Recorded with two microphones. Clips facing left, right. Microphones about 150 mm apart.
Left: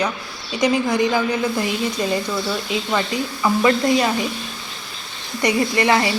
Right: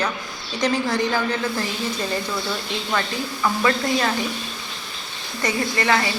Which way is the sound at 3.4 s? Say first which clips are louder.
Left 4 dB; 20° left (ahead or behind).